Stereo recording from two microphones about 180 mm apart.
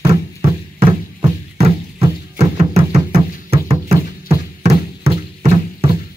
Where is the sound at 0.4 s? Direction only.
30° right (ahead or behind).